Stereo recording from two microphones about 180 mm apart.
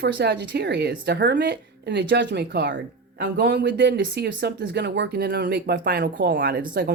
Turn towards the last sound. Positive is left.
turn(degrees=-55)  # may be behind; listen again after turning